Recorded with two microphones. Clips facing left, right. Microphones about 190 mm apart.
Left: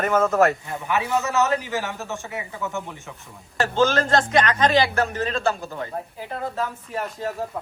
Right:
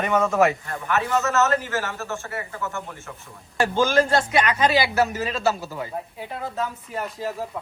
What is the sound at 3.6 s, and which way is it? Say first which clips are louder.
A man's voice: right 1 dB; 10° right (ahead or behind).